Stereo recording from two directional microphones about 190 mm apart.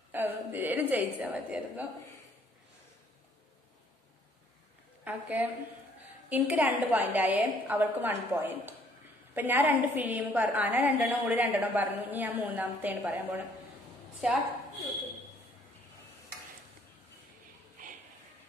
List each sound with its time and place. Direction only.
0.1 s a woman's voice: 10° right (ahead or behind)
5.0 s a woman's voice: 10° right (ahead or behind)
17.8 s a sound: 45° right (ahead or behind)